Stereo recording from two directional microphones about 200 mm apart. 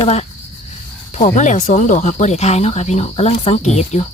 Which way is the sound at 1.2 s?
40° left (ahead or behind).